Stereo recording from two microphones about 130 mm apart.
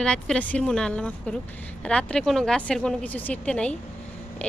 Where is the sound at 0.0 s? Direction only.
5° left (ahead or behind).